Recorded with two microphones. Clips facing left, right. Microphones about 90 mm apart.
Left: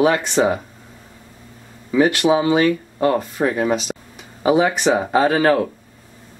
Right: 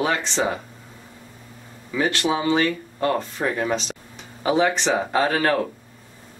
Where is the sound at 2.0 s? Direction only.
15° left (ahead or behind).